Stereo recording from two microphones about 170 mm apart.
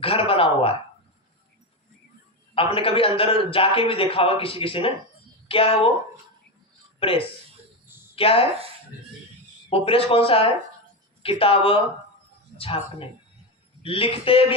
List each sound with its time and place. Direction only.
0.0 s speech: 35° left (ahead or behind)
2.6 s a man's voice: 35° left (ahead or behind)
7.0 s a man's voice: 30° left (ahead or behind)
9.6 s a man's voice: 35° left (ahead or behind)